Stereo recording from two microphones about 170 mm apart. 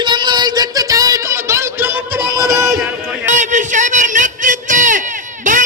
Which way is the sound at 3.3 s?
45° right (ahead or behind).